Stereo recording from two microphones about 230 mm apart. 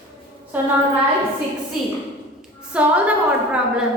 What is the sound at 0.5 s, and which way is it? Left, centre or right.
Music, centre.